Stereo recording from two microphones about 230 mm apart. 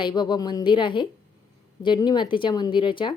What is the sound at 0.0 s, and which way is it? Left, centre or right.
A woman's voice, centre.